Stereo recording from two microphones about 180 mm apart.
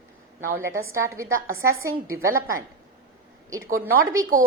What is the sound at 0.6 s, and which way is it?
A woman's voice, 15° right (ahead or behind).